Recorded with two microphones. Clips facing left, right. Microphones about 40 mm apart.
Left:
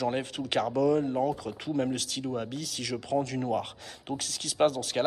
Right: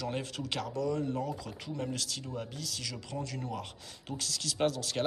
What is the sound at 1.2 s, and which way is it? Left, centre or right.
Speech, left.